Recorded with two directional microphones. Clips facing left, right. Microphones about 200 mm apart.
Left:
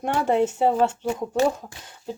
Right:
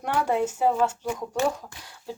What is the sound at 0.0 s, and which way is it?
Speech, 25° left (ahead or behind).